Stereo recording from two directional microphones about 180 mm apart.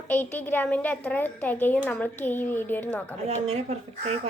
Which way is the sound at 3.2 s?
35° right (ahead or behind).